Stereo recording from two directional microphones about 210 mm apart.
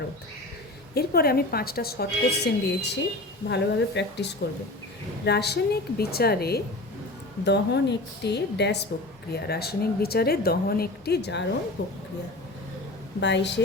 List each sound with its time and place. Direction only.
0.9 s a woman's voice: 45° left (ahead or behind)
13.1 s a woman's voice: 55° left (ahead or behind)